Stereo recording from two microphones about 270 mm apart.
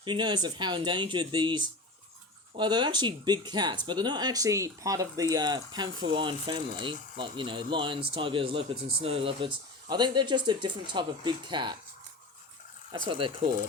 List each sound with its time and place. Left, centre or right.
0.0 s speech: centre
13.1 s speech: centre